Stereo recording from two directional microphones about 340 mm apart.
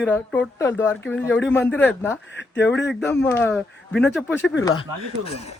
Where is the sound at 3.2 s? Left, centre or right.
Centre.